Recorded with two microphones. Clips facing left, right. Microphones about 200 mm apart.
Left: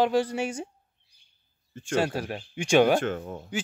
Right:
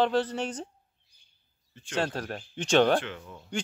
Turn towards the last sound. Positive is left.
turn(degrees=45)  # may be behind; listen again after turning